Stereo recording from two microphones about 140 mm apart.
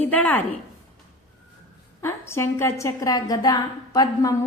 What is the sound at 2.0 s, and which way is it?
A woman's voice, 20° left (ahead or behind).